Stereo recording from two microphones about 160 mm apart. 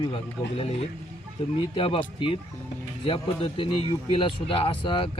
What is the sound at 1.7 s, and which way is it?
A man's voice, 35° left (ahead or behind).